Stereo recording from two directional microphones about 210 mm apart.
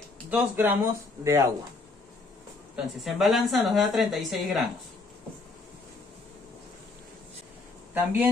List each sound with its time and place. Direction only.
0.3 s speech: 10° right (ahead or behind)
2.7 s a woman's voice: centre (ahead or behind)
7.9 s speech: 10° right (ahead or behind)